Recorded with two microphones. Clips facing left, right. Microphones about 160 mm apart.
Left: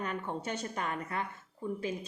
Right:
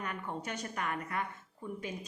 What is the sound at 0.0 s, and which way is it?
A woman's voice, 30° left (ahead or behind).